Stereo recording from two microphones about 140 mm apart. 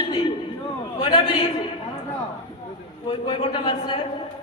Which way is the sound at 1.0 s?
40° left (ahead or behind).